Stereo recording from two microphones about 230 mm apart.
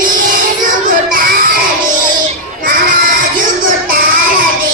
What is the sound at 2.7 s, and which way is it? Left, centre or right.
Child singing, right.